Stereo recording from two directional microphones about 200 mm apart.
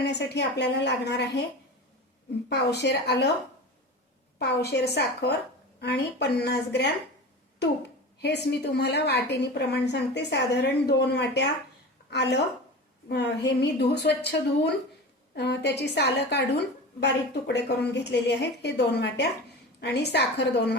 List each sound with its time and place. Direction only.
0.0 s a woman's voice: 55° left (ahead or behind)
2.5 s a woman's voice: 60° left (ahead or behind)
4.4 s a woman's voice: 55° left (ahead or behind)
8.2 s a woman's voice: 55° left (ahead or behind)